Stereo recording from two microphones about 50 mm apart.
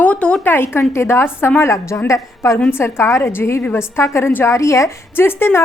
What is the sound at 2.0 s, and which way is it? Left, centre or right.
Speech, left.